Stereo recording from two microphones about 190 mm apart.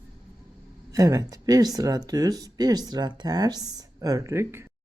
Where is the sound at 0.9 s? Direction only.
15° right (ahead or behind).